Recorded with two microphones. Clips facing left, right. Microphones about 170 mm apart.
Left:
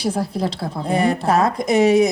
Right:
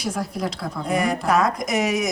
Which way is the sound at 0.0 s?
30° left (ahead or behind).